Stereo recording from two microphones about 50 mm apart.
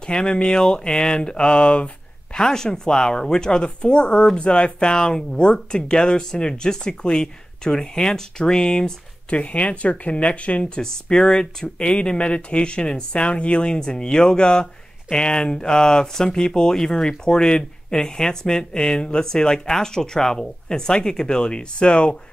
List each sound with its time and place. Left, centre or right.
0.0 s speech: centre